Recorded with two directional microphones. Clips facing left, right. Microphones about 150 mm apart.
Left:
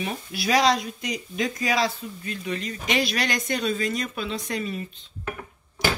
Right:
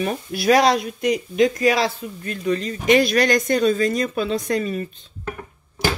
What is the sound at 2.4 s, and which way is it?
Speech, 40° right (ahead or behind).